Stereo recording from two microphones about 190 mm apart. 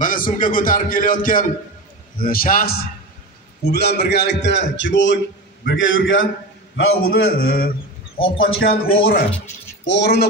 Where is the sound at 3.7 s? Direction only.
60° left (ahead or behind).